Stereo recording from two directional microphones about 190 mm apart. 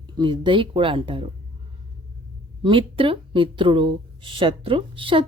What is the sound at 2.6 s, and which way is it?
Speech, 25° right (ahead or behind).